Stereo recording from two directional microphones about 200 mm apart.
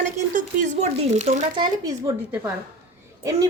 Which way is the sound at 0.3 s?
35° right (ahead or behind).